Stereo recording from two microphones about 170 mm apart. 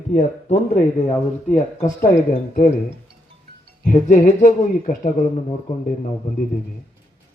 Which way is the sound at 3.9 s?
50° left (ahead or behind).